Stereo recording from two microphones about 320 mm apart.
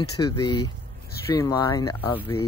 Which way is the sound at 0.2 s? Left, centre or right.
Centre.